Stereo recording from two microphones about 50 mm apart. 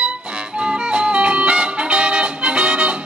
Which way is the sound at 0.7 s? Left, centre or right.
Right.